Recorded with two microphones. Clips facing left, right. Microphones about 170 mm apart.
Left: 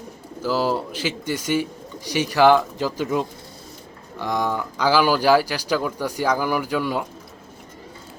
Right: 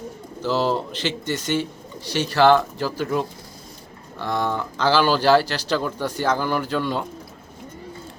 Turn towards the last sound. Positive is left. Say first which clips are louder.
# even
turn(degrees=10)  # may be behind; listen again after turning